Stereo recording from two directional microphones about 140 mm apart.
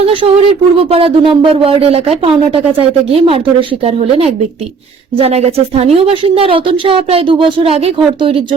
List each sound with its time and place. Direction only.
0.0 s a woman's voice: 40° right (ahead or behind)